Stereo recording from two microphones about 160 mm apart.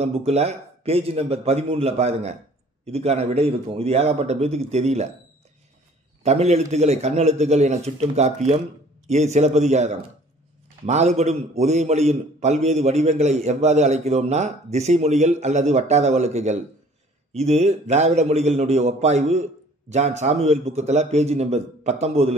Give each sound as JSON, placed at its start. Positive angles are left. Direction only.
{"t": 0.0, "sound": "a man's voice", "side_deg": -40}
{"t": 6.2, "sound": "a man's voice", "side_deg": -40}